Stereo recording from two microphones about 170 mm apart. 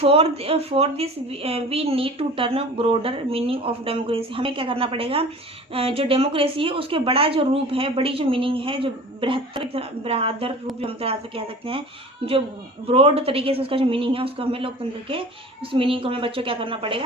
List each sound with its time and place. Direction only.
0.0 s a woman's voice: 35° right (ahead or behind)
15.7 s a woman's voice: 30° right (ahead or behind)